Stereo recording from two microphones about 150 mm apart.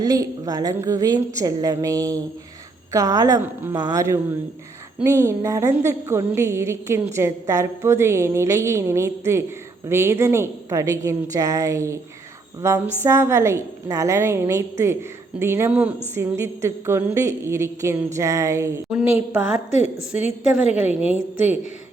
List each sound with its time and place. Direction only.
0.0 s a woman's voice: 25° right (ahead or behind)